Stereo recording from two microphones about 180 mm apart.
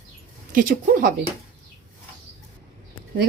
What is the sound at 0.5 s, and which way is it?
Speech, 50° right (ahead or behind).